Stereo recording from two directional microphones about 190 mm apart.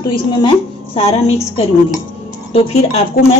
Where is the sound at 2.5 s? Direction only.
30° left (ahead or behind).